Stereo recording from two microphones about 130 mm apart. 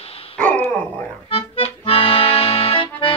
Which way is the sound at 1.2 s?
45° left (ahead or behind).